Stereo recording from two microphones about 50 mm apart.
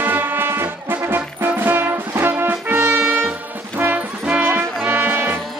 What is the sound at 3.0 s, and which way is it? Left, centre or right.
Music, right.